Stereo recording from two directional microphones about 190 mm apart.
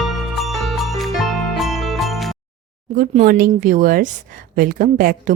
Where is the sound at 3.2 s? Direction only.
50° right (ahead or behind).